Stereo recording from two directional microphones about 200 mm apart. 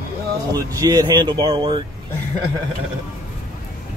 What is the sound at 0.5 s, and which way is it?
Speech, 15° right (ahead or behind).